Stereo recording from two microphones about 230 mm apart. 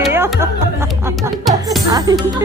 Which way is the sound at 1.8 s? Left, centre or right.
Centre.